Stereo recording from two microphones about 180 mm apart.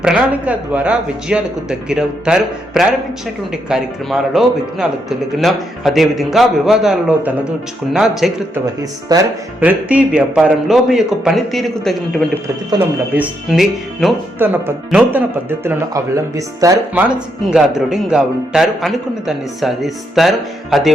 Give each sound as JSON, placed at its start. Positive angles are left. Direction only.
{"t": 0.0, "sound": "a man's voice", "side_deg": -5}
{"t": 8.5, "sound": "speech", "side_deg": -20}
{"t": 9.6, "sound": "a man's voice", "side_deg": -10}
{"t": 13.1, "sound": "a man's voice", "side_deg": -5}
{"t": 17.7, "sound": "a man's voice", "side_deg": -5}